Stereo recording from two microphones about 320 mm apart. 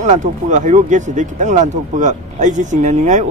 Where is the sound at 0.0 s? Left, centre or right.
Right.